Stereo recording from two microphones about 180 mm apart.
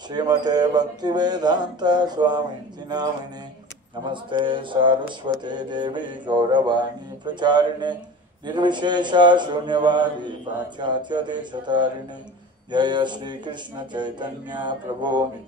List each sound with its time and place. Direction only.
0.1 s speech: 25° right (ahead or behind)
4.1 s speech: 25° right (ahead or behind)